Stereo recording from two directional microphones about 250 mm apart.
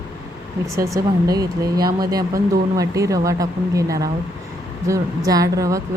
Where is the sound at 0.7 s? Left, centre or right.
Centre.